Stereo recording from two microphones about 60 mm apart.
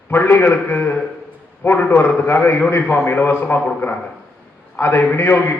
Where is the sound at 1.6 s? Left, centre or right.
Left.